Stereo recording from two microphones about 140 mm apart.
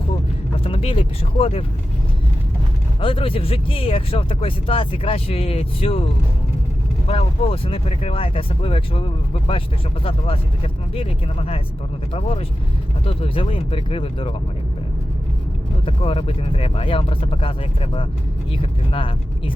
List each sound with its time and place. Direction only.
0.6 s speech: 45° left (ahead or behind)
3.0 s speech: 40° left (ahead or behind)
7.1 s speech: 45° left (ahead or behind)
15.9 s speech: 40° left (ahead or behind)